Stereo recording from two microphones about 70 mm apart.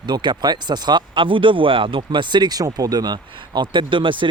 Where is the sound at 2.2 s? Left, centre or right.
Right.